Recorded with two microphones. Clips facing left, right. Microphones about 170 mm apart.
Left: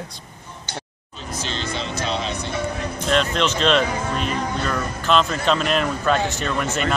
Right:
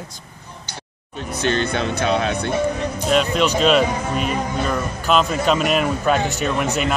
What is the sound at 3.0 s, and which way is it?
Speech, 5° right (ahead or behind).